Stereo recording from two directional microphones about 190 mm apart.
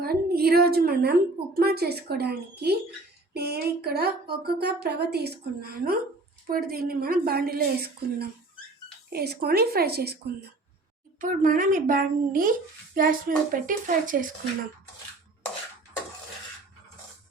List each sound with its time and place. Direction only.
0.0 s a woman's voice: 55° right (ahead or behind)
11.2 s a woman's voice: 45° right (ahead or behind)